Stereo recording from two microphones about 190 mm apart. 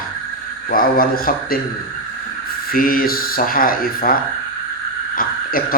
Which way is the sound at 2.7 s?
50° left (ahead or behind).